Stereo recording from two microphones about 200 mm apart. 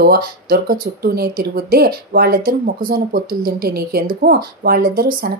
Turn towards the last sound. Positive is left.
turn(degrees=-50)  # may be behind; listen again after turning